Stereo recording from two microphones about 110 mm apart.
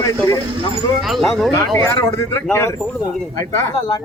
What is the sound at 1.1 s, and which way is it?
Speech, centre (ahead or behind).